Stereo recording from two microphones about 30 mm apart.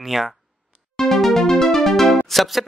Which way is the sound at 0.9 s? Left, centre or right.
Centre.